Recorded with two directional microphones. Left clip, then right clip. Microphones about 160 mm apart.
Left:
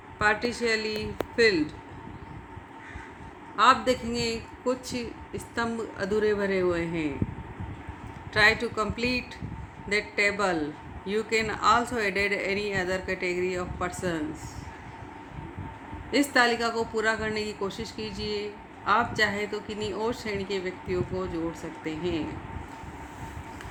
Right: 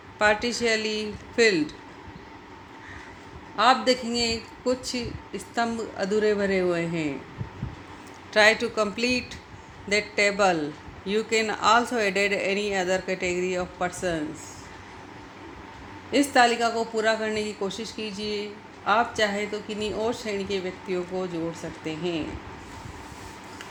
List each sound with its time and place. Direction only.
0.2 s a woman's voice: 20° right (ahead or behind)
3.5 s a woman's voice: 20° right (ahead or behind)
8.3 s a woman's voice: 20° right (ahead or behind)
16.1 s a woman's voice: 15° right (ahead or behind)